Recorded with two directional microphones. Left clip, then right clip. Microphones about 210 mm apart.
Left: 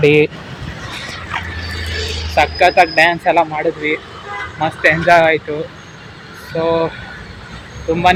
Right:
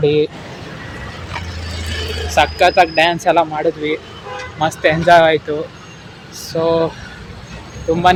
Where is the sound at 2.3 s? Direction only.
10° right (ahead or behind).